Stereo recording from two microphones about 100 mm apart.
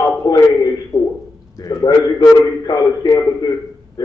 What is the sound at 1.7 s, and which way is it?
A man's voice, 40° left (ahead or behind).